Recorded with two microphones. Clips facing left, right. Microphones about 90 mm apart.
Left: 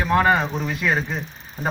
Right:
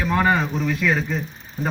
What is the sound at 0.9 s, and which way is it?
Speech, 35° left (ahead or behind).